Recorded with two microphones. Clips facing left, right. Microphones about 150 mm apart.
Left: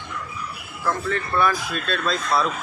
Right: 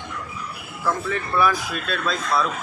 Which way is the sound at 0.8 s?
5° right (ahead or behind).